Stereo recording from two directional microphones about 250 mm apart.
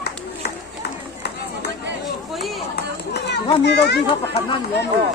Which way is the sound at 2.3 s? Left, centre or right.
Centre.